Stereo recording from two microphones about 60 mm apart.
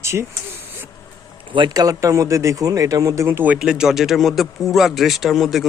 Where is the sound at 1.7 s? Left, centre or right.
Right.